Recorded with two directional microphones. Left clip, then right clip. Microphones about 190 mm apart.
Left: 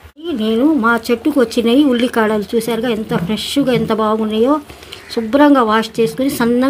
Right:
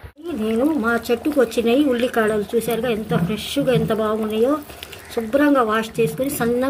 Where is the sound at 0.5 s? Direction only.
35° left (ahead or behind).